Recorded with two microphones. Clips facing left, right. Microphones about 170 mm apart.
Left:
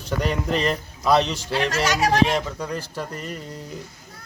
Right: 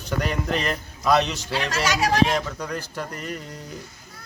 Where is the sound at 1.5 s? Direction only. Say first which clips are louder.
Left 2 dB; 50° left (ahead or behind).